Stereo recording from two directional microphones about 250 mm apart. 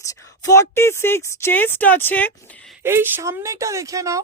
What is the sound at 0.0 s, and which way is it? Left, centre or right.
Speech, centre.